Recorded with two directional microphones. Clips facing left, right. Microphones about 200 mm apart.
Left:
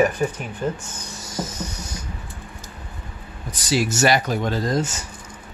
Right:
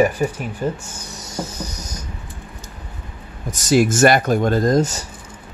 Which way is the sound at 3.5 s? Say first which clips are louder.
Right 7 dB; 45° right (ahead or behind).